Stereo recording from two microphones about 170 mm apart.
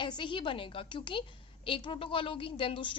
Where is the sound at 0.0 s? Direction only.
30° left (ahead or behind).